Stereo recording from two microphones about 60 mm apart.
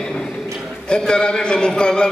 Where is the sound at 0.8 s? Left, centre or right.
Centre.